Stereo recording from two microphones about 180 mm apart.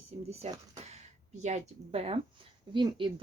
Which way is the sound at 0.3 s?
35° right (ahead or behind).